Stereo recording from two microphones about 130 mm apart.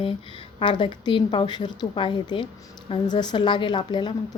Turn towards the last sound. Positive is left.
turn(degrees=35)  # may be behind; listen again after turning